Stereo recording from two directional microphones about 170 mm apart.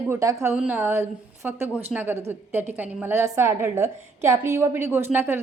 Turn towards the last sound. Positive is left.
turn(degrees=-15)  # may be behind; listen again after turning